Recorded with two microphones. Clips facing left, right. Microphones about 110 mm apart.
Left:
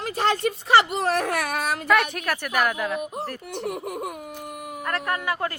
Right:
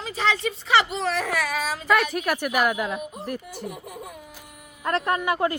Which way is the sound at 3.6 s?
65° left (ahead or behind).